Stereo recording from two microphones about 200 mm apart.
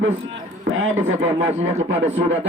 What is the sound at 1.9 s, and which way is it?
Speech, 70° right (ahead or behind).